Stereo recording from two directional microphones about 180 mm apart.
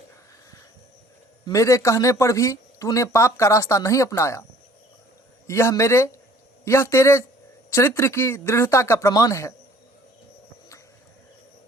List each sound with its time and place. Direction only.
1.5 s speech: 15° left (ahead or behind)
5.5 s speech: 15° left (ahead or behind)